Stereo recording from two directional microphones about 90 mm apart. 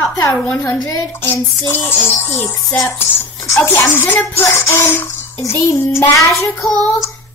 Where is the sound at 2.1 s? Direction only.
25° left (ahead or behind).